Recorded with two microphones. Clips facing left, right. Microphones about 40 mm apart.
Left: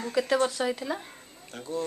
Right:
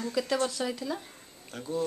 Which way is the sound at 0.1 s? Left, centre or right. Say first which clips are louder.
Left 5 dB; left.